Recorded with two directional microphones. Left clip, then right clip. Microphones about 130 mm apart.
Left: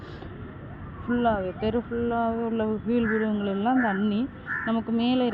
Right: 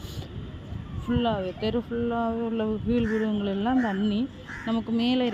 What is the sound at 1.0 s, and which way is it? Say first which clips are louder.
Speech: left 2 dB; 30° right (ahead or behind).